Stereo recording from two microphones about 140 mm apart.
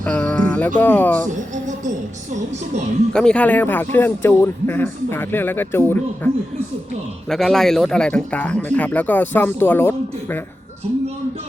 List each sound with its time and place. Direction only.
0.0 s a sound: 10° left (ahead or behind)
0.8 s speech: 15° left (ahead or behind)
1.3 s speech: 60° right (ahead or behind)
3.1 s speech: 5° left (ahead or behind)
7.3 s speech: 5° left (ahead or behind)